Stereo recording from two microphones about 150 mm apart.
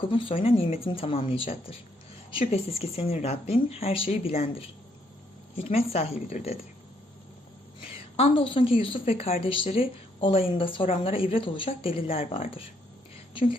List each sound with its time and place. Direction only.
0.1 s a woman's voice: 35° left (ahead or behind)
8.1 s a woman's voice: 40° left (ahead or behind)